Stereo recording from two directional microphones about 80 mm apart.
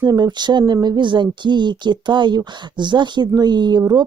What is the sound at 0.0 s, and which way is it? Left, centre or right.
Speech, right.